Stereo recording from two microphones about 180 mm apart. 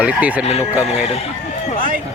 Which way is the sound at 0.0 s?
10° right (ahead or behind).